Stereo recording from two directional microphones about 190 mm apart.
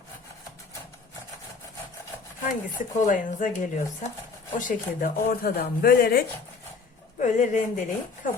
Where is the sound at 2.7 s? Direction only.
45° left (ahead or behind).